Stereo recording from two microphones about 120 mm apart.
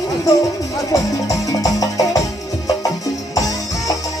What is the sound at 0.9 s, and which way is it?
Music, 30° left (ahead or behind).